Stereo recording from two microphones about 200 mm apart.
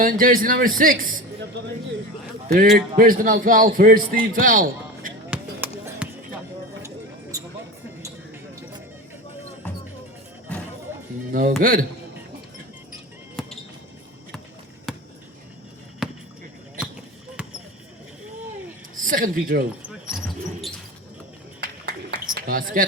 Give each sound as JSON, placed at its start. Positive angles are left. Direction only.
{"t": 0.0, "sound": "a man's voice", "side_deg": -45}
{"t": 2.5, "sound": "a man's voice", "side_deg": -45}
{"t": 5.3, "sound": "music", "side_deg": -10}
{"t": 6.8, "sound": "a sound", "side_deg": -15}
{"t": 11.3, "sound": "a man's voice", "side_deg": -45}
{"t": 13.4, "sound": "basketball bounce", "side_deg": 0}
{"t": 14.9, "sound": "a sound", "side_deg": 0}
{"t": 18.9, "sound": "a woman's voice", "side_deg": -45}
{"t": 19.8, "sound": "basketball bounce", "side_deg": -5}
{"t": 22.4, "sound": "a man's voice", "side_deg": -45}